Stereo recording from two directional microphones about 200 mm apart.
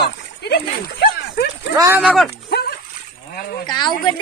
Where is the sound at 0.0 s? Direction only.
55° left (ahead or behind).